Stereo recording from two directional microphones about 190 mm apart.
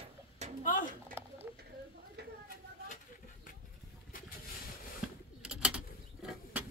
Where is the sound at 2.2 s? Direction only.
60° right (ahead or behind).